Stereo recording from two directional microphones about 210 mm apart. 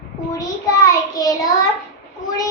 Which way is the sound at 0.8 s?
15° left (ahead or behind).